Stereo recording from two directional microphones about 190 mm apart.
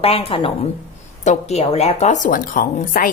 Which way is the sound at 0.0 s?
30° left (ahead or behind).